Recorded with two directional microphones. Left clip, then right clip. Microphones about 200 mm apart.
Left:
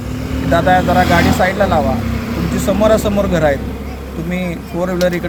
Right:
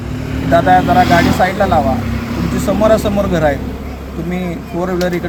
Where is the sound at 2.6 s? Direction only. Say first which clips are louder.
Right 1 dB; centre (ahead or behind).